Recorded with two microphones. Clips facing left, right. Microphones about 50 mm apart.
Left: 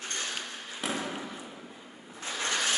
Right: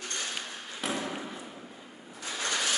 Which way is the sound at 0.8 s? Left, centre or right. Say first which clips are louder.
Even; centre.